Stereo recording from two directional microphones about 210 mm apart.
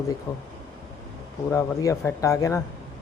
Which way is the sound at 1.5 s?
15° left (ahead or behind).